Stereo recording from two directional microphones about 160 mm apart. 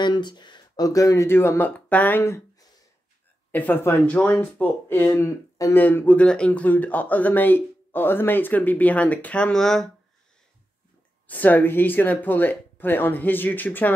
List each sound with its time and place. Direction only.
0.0 s speech: 30° left (ahead or behind)
3.5 s speech: 10° left (ahead or behind)
11.2 s speech: 10° left (ahead or behind)